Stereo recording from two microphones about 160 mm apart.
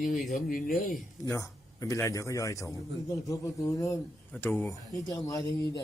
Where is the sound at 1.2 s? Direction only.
20° left (ahead or behind).